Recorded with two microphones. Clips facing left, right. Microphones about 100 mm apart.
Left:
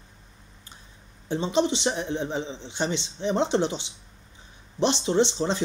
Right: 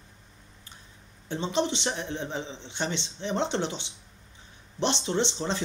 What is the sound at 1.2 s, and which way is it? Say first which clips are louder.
A man's voice: left 4 dB; 15° left (ahead or behind).